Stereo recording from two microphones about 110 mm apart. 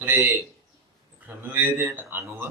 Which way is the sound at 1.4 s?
15° right (ahead or behind).